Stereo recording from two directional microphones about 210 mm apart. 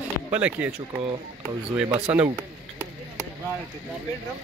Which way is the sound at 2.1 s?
5° right (ahead or behind).